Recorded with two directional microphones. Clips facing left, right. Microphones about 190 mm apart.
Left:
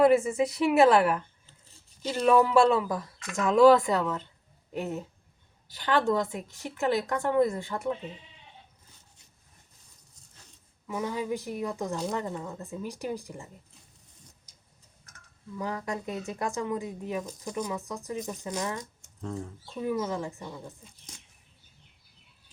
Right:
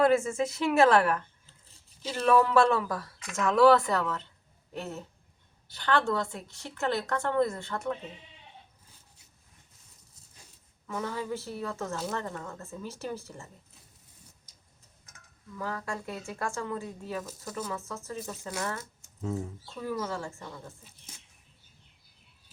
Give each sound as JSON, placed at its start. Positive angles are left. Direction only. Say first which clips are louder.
{"t": 0.2, "sound": "a woman's voice", "louder": "left 3 dB", "side_deg": 15}
{"t": 10.8, "sound": "a woman's voice", "louder": "left 3 dB", "side_deg": 15}
{"t": 15.5, "sound": "a woman's voice", "louder": "left 2 dB", "side_deg": 20}
{"t": 18.8, "sound": "speech", "louder": "even", "side_deg": -5}
{"t": 19.7, "sound": "a woman's voice", "louder": "left 4 dB", "side_deg": 15}